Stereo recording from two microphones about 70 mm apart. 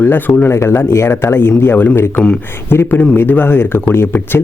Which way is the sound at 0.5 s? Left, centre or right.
Left.